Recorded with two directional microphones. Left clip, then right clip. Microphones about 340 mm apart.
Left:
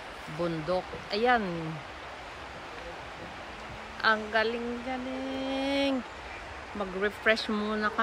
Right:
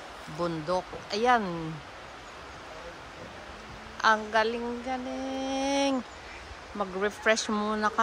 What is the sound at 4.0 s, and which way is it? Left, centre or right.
Speech, centre.